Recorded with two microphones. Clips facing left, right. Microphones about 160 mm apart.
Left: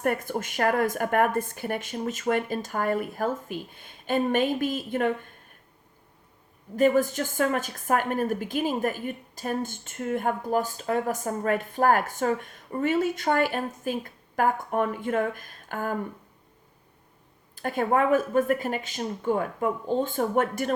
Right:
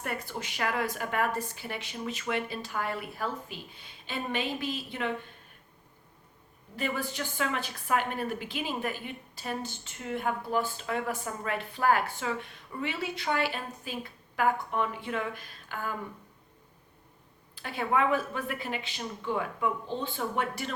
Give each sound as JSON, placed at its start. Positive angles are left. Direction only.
{"t": 0.0, "sound": "a woman's voice", "side_deg": 50}
{"t": 6.7, "sound": "a woman's voice", "side_deg": 45}
{"t": 17.5, "sound": "a woman's voice", "side_deg": 45}